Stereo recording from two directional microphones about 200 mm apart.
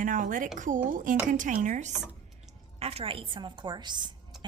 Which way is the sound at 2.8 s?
30° right (ahead or behind).